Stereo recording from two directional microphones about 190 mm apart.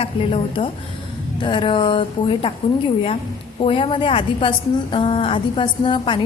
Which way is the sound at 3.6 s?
25° left (ahead or behind).